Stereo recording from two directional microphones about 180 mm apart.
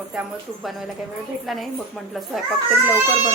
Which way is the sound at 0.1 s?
Centre (ahead or behind).